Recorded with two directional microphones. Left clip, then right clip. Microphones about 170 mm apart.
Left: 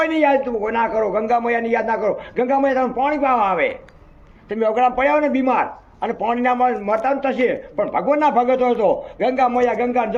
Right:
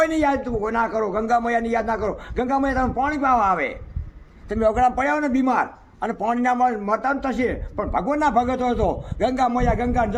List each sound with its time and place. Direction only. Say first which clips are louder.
0.0 s a man's voice: left 3 dB; 40° right (ahead or behind)